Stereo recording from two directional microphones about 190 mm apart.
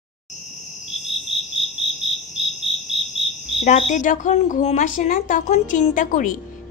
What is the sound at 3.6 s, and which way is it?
A woman's voice, 40° left (ahead or behind).